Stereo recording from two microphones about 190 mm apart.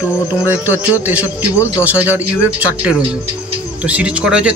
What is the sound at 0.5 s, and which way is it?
Speech, 10° right (ahead or behind).